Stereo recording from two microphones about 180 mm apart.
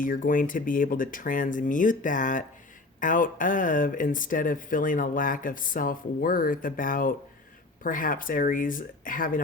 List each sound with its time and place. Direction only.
0.0 s speech: 50° left (ahead or behind)